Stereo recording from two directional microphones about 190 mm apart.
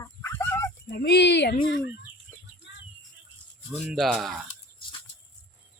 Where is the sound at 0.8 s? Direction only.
60° left (ahead or behind).